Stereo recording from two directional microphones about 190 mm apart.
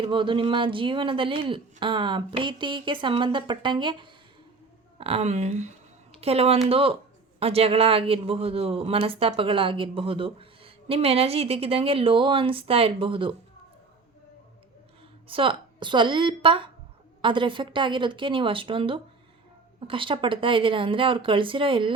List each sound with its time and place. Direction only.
0.0 s speech: 25° right (ahead or behind)
15.3 s speech: 25° right (ahead or behind)